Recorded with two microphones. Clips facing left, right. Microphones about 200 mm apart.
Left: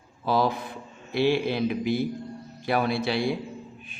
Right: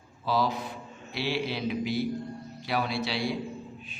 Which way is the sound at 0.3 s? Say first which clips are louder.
Left 3 dB; 55° left (ahead or behind).